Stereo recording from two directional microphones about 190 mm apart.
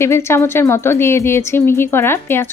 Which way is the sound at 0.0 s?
15° left (ahead or behind).